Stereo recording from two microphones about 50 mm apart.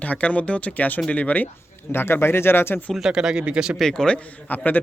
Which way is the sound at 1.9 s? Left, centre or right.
Left.